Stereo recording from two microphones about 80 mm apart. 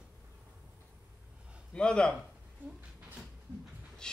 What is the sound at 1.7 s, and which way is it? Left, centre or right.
Speech, centre.